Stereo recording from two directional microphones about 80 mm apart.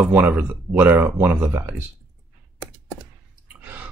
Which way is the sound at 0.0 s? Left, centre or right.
Centre.